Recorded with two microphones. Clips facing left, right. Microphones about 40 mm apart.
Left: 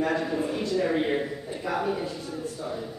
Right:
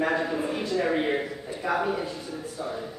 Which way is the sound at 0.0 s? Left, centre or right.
Centre.